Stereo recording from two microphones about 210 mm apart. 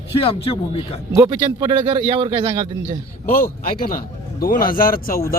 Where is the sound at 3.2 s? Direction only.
45° left (ahead or behind).